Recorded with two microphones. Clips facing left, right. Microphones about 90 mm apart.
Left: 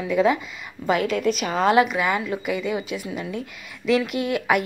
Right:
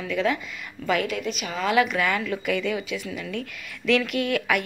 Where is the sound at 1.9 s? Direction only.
20° left (ahead or behind).